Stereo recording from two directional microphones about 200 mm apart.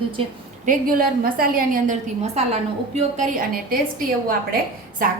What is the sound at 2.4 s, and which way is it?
A woman's voice, 30° right (ahead or behind).